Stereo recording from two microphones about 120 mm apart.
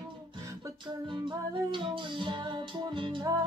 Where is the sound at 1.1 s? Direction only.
40° right (ahead or behind).